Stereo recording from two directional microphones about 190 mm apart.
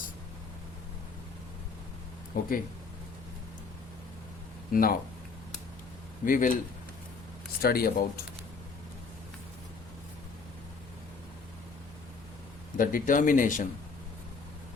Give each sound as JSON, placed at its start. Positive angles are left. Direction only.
{"t": 2.3, "sound": "speech", "side_deg": 45}
{"t": 4.7, "sound": "speech", "side_deg": 50}
{"t": 6.2, "sound": "speech", "side_deg": 45}
{"t": 7.6, "sound": "speech", "side_deg": 55}
{"t": 12.7, "sound": "speech", "side_deg": 45}